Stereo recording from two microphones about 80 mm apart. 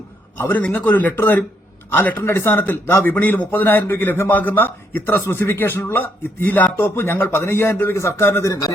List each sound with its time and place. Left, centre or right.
0.3 s a man's voice: left